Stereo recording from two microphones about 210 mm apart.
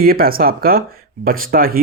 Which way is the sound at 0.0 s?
45° right (ahead or behind).